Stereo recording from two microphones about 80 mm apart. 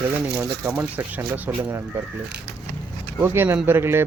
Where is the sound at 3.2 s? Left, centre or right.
Right.